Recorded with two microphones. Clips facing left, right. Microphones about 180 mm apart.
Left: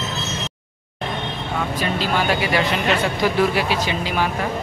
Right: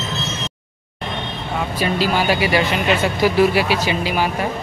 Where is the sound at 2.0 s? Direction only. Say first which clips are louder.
Right 3 dB; 5° right (ahead or behind).